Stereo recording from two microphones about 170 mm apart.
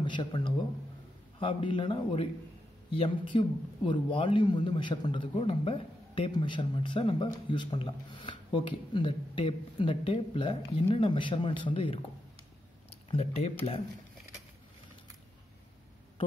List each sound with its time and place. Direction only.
0.0 s a man's voice: 25° left (ahead or behind)
13.1 s speech: 35° left (ahead or behind)